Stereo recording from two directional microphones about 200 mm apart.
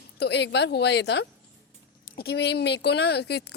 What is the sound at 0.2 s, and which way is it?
Speech, 55° left (ahead or behind).